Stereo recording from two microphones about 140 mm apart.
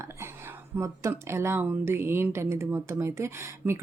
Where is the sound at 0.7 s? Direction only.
20° right (ahead or behind).